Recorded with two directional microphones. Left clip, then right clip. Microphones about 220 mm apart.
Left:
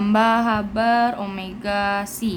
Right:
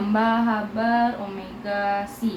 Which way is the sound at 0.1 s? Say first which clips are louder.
Left 4 dB; 35° left (ahead or behind).